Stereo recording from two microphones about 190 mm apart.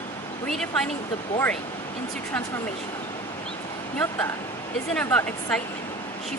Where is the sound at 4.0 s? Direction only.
10° left (ahead or behind).